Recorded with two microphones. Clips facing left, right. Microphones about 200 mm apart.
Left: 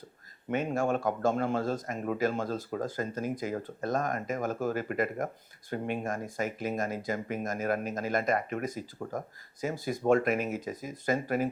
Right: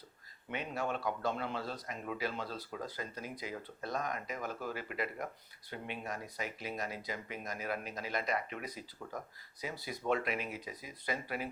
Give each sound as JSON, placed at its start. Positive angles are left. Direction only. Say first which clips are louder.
{"t": 0.5, "sound": "speech", "louder": "left 9 dB", "side_deg": 45}